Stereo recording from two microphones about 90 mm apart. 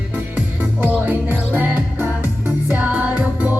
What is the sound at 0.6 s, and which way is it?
Music, 20° right (ahead or behind).